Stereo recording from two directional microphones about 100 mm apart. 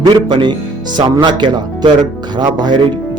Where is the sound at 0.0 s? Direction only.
50° right (ahead or behind).